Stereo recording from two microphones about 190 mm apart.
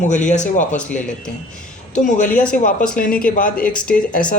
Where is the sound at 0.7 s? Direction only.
5° left (ahead or behind).